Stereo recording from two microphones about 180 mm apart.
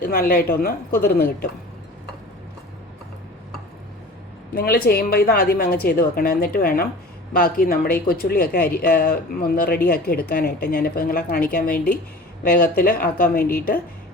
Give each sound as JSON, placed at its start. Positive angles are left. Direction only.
{"t": 0.0, "sound": "a woman's voice", "side_deg": 50}
{"t": 4.5, "sound": "a woman's voice", "side_deg": 55}